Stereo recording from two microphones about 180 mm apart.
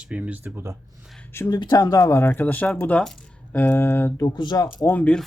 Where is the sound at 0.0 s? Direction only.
5° right (ahead or behind).